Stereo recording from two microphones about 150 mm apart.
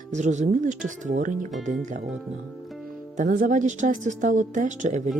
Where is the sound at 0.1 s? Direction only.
50° right (ahead or behind).